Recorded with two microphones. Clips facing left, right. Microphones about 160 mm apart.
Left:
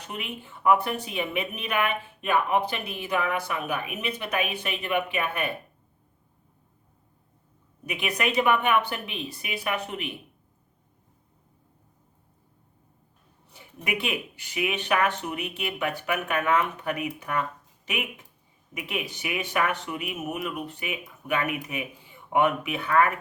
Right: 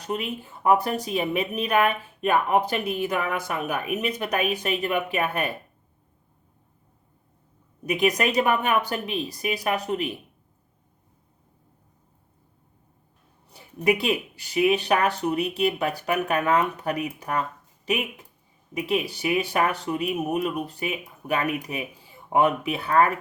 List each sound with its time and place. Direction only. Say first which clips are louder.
0.1 s speech: right 8 dB; 40° right (ahead or behind)
7.9 s speech: right 6 dB; 40° right (ahead or behind)
13.5 s speech: right 9 dB; 35° right (ahead or behind)